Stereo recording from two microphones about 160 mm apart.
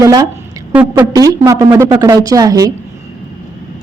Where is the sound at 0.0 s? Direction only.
20° right (ahead or behind).